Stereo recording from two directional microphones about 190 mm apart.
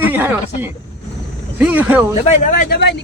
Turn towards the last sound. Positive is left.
turn(degrees=65)  # may be behind; listen again after turning